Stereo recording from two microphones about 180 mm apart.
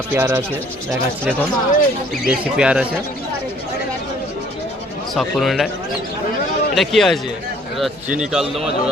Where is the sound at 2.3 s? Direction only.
5° right (ahead or behind).